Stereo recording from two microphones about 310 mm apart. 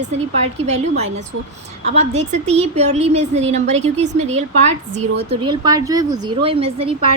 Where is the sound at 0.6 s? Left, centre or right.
Right.